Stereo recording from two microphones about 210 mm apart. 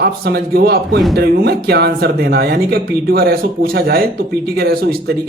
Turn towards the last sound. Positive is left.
turn(degrees=-45)  # may be behind; listen again after turning